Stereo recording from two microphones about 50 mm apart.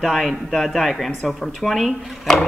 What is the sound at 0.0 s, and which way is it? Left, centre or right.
A woman's voice, centre.